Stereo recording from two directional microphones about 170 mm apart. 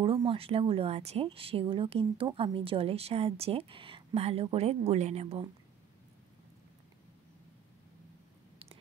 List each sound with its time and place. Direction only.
0.0 s speech: 30° right (ahead or behind)